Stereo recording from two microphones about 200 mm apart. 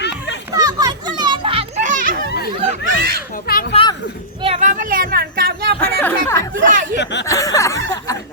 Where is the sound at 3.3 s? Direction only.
45° left (ahead or behind).